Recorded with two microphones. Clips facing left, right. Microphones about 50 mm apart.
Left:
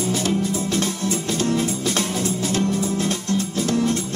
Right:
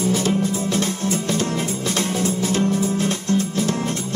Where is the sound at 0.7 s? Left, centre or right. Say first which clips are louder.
Right 1 dB; right.